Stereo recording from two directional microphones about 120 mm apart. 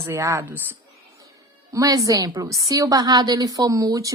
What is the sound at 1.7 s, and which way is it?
A woman's voice, 30° right (ahead or behind).